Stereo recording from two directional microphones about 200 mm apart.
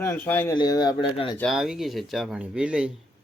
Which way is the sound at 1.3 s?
Centre (ahead or behind).